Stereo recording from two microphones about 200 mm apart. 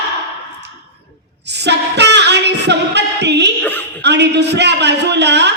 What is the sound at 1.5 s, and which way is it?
Singing, 60° right (ahead or behind).